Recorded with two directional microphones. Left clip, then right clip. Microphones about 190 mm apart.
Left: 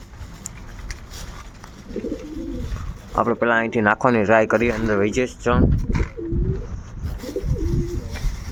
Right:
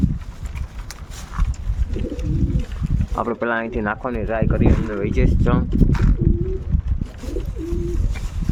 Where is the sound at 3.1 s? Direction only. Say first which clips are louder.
Left 3 dB; 5° left (ahead or behind).